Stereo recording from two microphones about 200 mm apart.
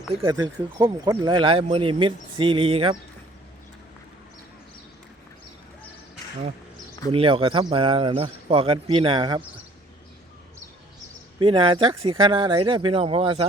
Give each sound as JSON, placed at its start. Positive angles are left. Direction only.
{"t": 0.3, "sound": "speech", "side_deg": -20}
{"t": 7.1, "sound": "speech", "side_deg": -25}
{"t": 11.3, "sound": "speech", "side_deg": -25}